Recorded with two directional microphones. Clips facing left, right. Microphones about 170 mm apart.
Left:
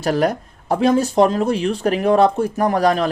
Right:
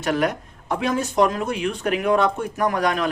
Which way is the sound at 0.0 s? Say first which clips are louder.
Left 4 dB; 35° left (ahead or behind).